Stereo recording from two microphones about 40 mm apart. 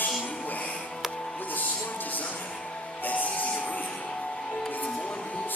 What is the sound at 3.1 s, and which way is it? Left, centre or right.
Music, left.